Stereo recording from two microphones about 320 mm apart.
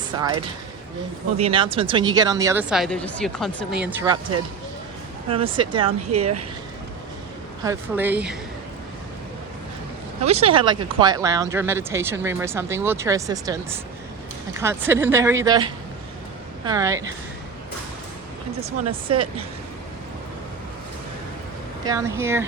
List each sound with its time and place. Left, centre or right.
0.1 s speech: centre
1.4 s speech: centre
5.3 s speech: centre
6.1 s speech: right
7.6 s speech: centre
10.2 s speech: centre
14.6 s speech: centre
18.6 s speech: centre
21.8 s speech: centre